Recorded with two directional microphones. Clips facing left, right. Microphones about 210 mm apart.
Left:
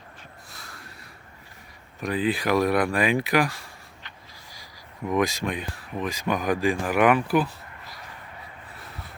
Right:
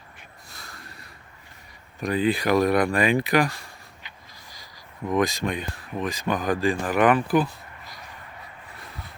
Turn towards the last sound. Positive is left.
turn(degrees=5)  # may be behind; listen again after turning